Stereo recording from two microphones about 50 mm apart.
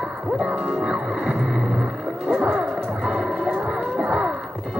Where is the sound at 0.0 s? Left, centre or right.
Centre.